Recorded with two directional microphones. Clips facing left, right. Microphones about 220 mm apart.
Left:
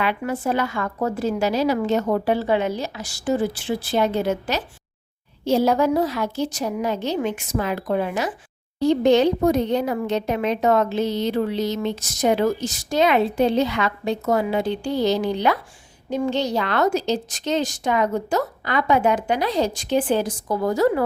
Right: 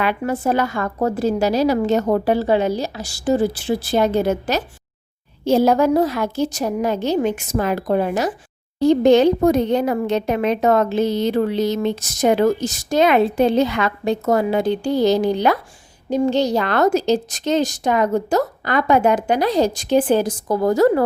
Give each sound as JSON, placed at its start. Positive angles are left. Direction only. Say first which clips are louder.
{"t": 0.0, "sound": "a woman's voice", "louder": "right 3 dB", "side_deg": -40}